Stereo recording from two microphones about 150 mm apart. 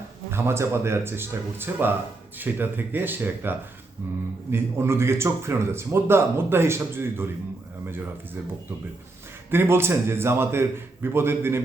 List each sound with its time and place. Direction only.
0.3 s speech: 15° right (ahead or behind)
4.5 s speech: 15° right (ahead or behind)
9.5 s speech: 15° right (ahead or behind)